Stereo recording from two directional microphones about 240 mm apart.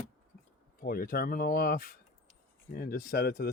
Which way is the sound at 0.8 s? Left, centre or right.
Left.